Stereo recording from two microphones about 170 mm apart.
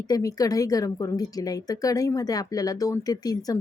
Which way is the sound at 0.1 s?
20° left (ahead or behind).